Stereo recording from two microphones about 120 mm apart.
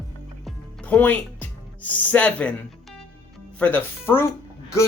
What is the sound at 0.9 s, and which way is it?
Speech, 10° left (ahead or behind).